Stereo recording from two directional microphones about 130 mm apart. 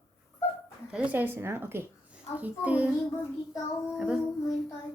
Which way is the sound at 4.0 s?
5° right (ahead or behind).